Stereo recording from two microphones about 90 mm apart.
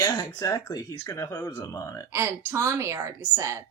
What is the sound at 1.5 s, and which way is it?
Speech, 45° left (ahead or behind).